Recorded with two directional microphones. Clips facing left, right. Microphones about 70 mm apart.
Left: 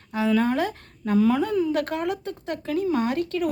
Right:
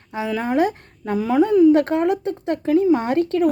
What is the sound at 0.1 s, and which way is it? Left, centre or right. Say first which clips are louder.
Speech: even; centre.